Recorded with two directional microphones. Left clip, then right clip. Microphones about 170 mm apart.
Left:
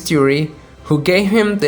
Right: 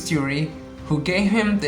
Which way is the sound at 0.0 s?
40° left (ahead or behind).